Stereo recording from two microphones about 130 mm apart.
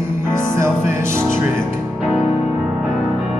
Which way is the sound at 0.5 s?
20° right (ahead or behind).